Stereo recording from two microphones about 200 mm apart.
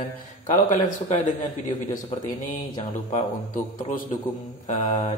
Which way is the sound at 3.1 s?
40° left (ahead or behind).